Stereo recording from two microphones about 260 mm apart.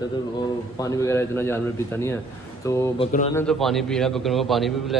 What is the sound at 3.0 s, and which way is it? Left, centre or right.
Speech, left.